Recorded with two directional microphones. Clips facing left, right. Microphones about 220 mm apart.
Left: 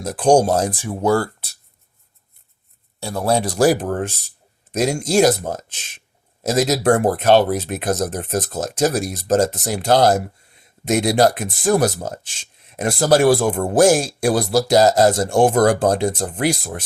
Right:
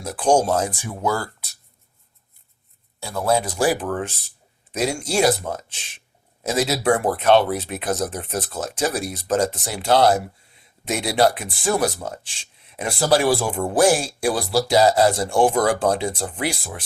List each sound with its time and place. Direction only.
0.0 s speech: 40° left (ahead or behind)
3.0 s speech: 30° left (ahead or behind)